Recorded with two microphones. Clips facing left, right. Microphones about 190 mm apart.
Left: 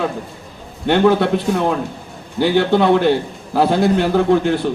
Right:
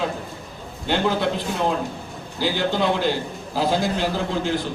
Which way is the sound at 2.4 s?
60° left (ahead or behind).